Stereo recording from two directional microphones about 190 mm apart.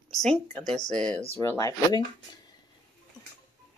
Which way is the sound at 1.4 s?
15° left (ahead or behind).